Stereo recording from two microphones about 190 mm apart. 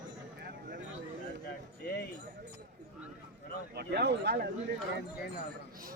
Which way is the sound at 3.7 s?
60° right (ahead or behind).